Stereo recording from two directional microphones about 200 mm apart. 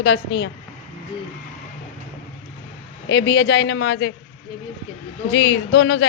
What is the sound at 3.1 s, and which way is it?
A woman's voice, 65° left (ahead or behind).